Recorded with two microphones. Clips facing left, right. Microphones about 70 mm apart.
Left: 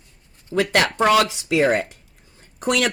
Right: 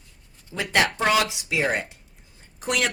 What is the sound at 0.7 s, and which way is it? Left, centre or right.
Speech, left.